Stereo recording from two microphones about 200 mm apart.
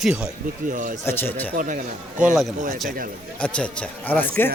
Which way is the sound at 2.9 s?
45° right (ahead or behind).